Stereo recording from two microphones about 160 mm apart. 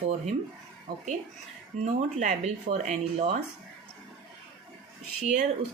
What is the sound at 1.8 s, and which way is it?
Speech, 50° right (ahead or behind).